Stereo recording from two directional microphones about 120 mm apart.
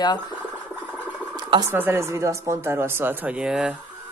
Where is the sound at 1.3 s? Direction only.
35° right (ahead or behind).